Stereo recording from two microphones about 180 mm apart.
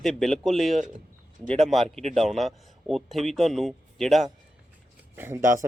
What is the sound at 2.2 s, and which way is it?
Speech, centre (ahead or behind).